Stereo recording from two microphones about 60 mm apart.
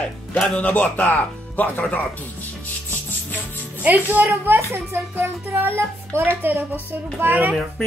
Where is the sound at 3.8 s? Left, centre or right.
Right.